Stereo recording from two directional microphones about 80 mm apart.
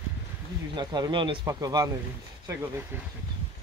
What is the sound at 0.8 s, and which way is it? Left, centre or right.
Speech, right.